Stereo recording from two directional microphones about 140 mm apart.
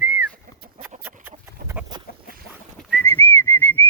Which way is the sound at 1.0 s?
15° right (ahead or behind).